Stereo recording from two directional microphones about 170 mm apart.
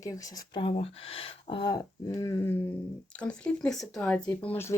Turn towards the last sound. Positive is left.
turn(degrees=10)  # may be behind; listen again after turning